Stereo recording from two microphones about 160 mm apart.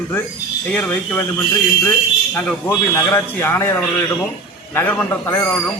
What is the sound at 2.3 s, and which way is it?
A man's voice, 15° left (ahead or behind).